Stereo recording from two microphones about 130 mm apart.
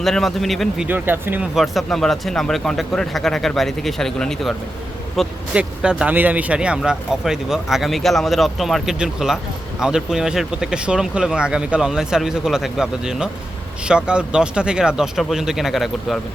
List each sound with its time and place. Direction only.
0.0 s speech: centre (ahead or behind)
0.9 s speech: 15° right (ahead or behind)
1.5 s speech: centre (ahead or behind)